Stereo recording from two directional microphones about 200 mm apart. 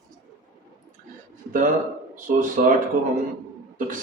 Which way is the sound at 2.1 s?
40° right (ahead or behind).